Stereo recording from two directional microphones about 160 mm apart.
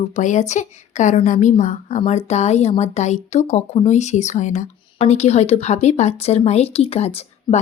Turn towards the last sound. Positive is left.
turn(degrees=40)  # may be behind; listen again after turning